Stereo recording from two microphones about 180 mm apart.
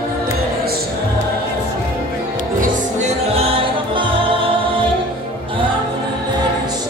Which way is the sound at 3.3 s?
30° right (ahead or behind).